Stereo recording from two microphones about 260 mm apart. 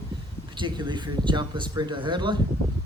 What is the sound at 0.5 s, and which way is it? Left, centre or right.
Speech, centre.